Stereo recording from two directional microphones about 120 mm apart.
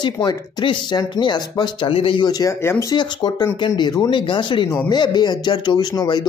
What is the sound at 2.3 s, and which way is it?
Speech, 25° left (ahead or behind).